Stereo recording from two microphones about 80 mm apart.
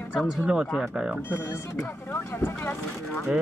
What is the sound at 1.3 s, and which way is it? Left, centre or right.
Speech, left.